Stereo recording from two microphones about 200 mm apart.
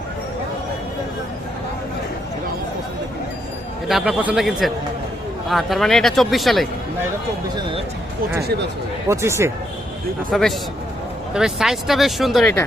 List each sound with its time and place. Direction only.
3.8 s speech: centre (ahead or behind)
7.5 s speech: 25° right (ahead or behind)
9.0 s speech: 15° right (ahead or behind)
10.3 s speech: centre (ahead or behind)